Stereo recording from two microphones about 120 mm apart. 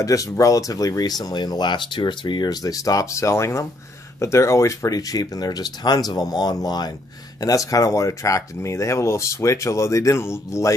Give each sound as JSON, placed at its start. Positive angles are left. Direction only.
{"t": 0.0, "sound": "speech", "side_deg": 30}